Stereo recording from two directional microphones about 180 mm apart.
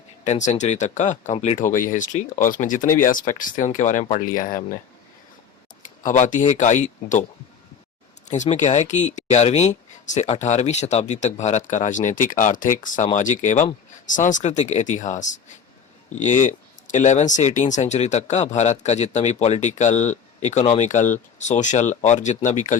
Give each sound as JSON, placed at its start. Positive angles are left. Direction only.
{"t": 0.3, "sound": "speech", "side_deg": 40}
{"t": 6.0, "sound": "speech", "side_deg": 45}
{"t": 8.3, "sound": "speech", "side_deg": 40}